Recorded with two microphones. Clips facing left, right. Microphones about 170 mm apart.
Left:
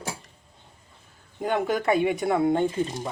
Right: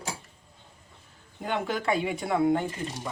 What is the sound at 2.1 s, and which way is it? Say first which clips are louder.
Speech: left 2 dB; 25° left (ahead or behind).